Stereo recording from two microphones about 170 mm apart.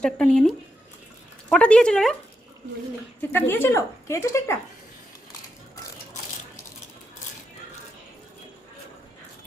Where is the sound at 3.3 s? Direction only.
15° left (ahead or behind).